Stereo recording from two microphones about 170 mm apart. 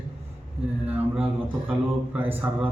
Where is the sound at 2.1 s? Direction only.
10° right (ahead or behind).